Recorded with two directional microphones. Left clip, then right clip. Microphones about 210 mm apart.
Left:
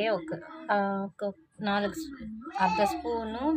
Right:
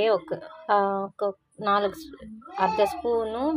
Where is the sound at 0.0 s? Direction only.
15° right (ahead or behind).